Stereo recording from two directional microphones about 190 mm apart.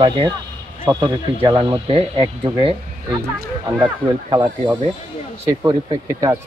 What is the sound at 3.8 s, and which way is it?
Speech, 25° right (ahead or behind).